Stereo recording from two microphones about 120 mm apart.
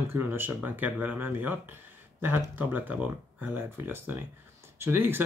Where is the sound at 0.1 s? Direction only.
20° right (ahead or behind).